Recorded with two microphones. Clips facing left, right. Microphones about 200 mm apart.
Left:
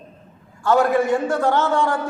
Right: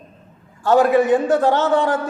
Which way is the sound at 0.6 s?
15° right (ahead or behind).